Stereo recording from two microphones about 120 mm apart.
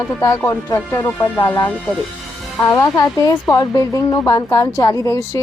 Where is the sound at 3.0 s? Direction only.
30° left (ahead or behind).